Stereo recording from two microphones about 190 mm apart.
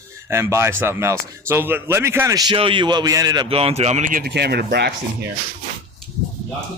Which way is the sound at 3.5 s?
30° right (ahead or behind).